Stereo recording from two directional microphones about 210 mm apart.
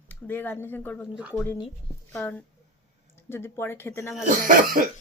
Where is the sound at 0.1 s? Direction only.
10° left (ahead or behind).